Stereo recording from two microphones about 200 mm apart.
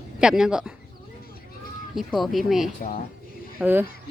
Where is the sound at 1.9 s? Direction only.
Centre (ahead or behind).